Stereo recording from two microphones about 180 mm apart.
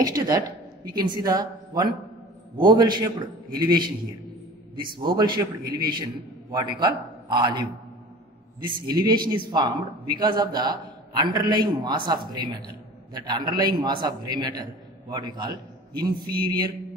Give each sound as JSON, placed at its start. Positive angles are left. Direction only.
{"t": 0.0, "sound": "a man's voice", "side_deg": -20}
{"t": 4.9, "sound": "a man's voice", "side_deg": -25}
{"t": 8.6, "sound": "a man's voice", "side_deg": -25}